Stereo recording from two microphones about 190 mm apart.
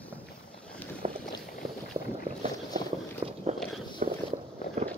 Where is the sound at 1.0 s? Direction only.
35° right (ahead or behind).